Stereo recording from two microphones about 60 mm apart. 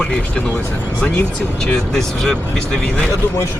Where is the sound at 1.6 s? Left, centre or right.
Centre.